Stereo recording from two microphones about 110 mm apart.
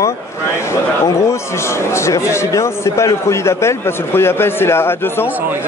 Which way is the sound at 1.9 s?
25° left (ahead or behind).